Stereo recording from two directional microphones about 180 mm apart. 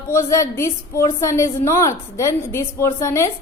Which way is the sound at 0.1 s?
15° left (ahead or behind).